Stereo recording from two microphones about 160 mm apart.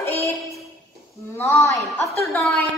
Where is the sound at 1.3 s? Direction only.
15° left (ahead or behind).